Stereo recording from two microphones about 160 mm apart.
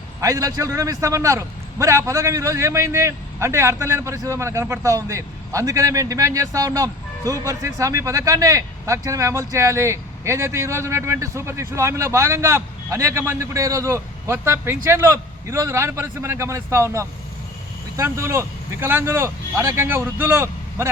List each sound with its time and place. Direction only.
0.2 s a man's voice: 20° right (ahead or behind)